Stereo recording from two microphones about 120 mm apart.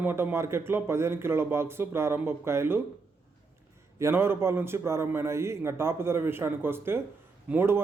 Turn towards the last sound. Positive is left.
turn(degrees=-20)  # may be behind; listen again after turning